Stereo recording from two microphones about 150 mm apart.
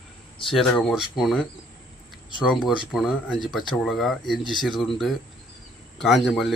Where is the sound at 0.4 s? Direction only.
5° left (ahead or behind).